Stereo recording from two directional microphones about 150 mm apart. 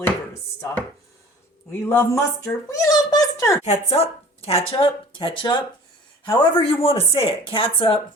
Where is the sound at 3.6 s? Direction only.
45° left (ahead or behind).